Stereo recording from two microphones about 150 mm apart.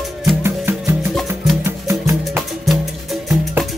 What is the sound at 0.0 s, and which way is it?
Music, centre (ahead or behind).